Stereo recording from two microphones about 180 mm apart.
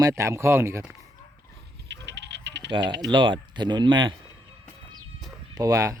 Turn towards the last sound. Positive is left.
turn(degrees=-20)  # may be behind; listen again after turning